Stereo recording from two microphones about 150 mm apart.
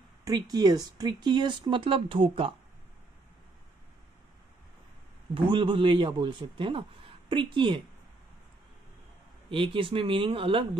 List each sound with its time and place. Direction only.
0.2 s speech: 25° right (ahead or behind)
5.3 s speech: 35° right (ahead or behind)
9.5 s speech: 35° right (ahead or behind)